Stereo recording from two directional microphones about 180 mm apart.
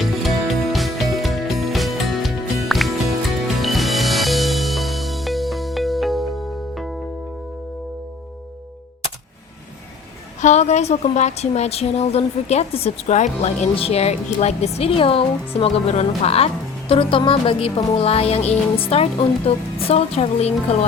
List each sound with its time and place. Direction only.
0.7 s music: centre (ahead or behind)
10.4 s a woman's voice: 40° left (ahead or behind)